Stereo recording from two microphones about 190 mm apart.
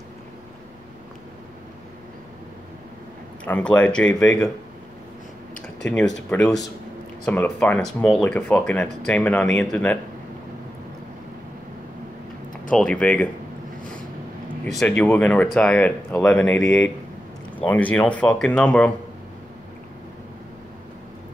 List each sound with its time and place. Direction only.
3.4 s speech: 5° left (ahead or behind)
6.3 s speech: 10° left (ahead or behind)
12.7 s speech: 5° left (ahead or behind)
14.6 s speech: 5° left (ahead or behind)
16.6 s speech: 15° left (ahead or behind)